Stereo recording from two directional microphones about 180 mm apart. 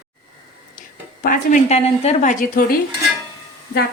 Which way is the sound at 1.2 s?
45° left (ahead or behind).